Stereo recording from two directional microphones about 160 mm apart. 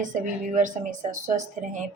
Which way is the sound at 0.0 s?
55° right (ahead or behind).